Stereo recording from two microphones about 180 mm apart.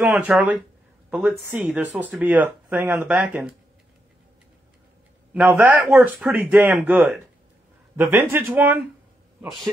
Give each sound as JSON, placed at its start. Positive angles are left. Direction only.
{"t": 0.0, "sound": "speech", "side_deg": -10}
{"t": 5.3, "sound": "a man's voice", "side_deg": -10}